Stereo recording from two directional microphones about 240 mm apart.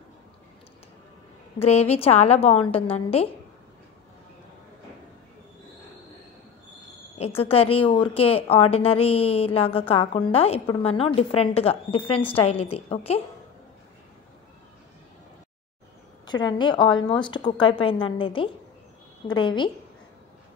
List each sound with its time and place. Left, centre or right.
1.6 s a woman's voice: left
7.2 s a woman's voice: left
16.3 s a woman's voice: centre